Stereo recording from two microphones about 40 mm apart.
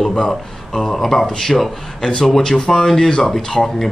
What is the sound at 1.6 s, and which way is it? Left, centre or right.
A man's voice, centre.